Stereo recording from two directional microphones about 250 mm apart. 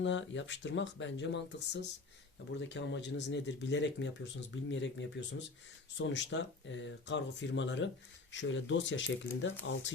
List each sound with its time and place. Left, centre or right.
0.0 s speech: left